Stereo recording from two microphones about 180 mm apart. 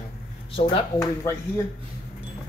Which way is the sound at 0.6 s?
30° left (ahead or behind).